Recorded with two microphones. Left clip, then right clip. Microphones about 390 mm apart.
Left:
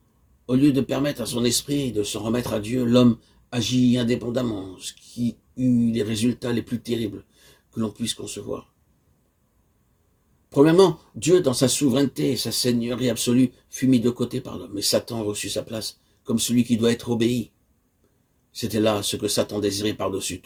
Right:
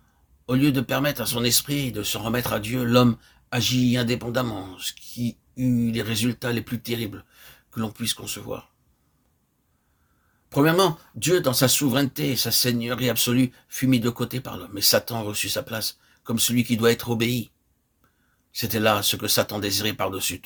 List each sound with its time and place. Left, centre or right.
0.4 s speech: right
10.5 s speech: right
18.5 s speech: right